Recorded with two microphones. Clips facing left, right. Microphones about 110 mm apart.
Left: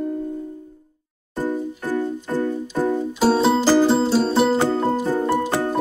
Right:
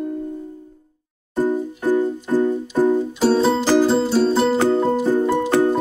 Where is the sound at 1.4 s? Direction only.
15° right (ahead or behind).